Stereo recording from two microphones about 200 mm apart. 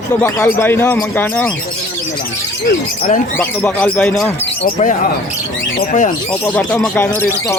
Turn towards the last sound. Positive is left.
turn(degrees=10)  # may be behind; listen again after turning